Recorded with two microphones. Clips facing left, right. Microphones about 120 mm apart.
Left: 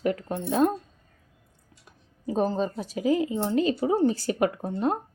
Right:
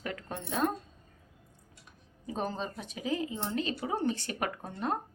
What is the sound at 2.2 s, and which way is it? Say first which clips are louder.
Speech: left 9 dB; 35° left (ahead or behind).